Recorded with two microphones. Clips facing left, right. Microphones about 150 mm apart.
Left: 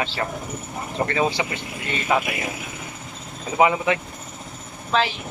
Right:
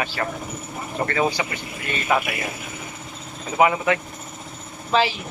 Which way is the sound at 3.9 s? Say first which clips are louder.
Right 1 dB; 20° left (ahead or behind).